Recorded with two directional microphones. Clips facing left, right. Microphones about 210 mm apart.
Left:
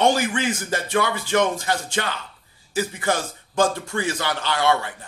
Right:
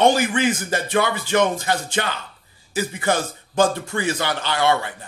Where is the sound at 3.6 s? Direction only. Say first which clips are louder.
Right 2 dB; 20° right (ahead or behind).